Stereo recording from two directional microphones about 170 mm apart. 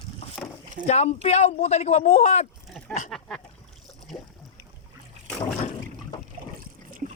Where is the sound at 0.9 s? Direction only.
40° left (ahead or behind).